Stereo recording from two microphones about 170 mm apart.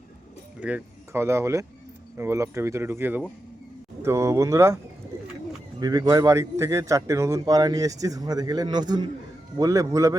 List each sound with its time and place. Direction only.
0.6 s speech: 10° right (ahead or behind)
5.8 s a man's voice: 20° right (ahead or behind)